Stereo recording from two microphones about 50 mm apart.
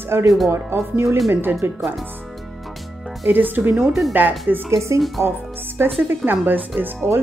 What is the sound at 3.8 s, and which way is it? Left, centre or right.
Speech, centre.